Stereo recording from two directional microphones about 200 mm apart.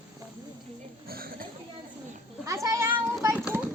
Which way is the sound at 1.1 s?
50° right (ahead or behind).